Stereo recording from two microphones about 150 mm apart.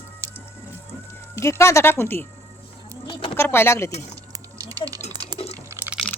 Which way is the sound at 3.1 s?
35° left (ahead or behind).